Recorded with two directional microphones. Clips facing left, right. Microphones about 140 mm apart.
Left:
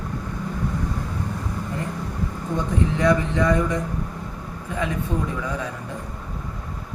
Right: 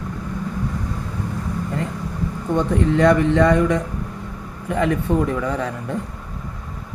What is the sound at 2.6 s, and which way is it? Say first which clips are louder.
A man's voice: right 6 dB; 70° right (ahead or behind).